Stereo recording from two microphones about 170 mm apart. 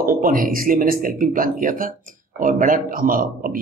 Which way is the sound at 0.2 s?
55° right (ahead or behind).